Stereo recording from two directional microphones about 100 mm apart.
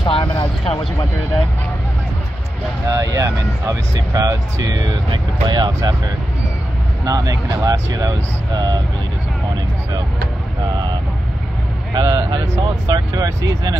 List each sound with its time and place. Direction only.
0.1 s vehicle: 55° left (ahead or behind)
2.9 s speech: 35° right (ahead or behind)
7.1 s speech: 35° right (ahead or behind)
10.7 s vehicle: 45° right (ahead or behind)
11.9 s speech: 50° right (ahead or behind)